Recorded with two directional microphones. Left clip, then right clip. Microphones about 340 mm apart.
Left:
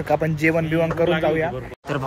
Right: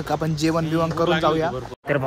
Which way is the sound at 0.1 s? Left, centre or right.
Centre.